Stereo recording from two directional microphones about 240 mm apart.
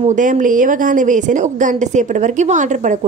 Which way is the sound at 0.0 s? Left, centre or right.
Right.